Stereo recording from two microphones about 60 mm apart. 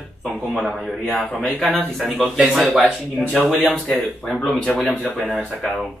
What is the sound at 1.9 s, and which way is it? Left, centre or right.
Speech, centre.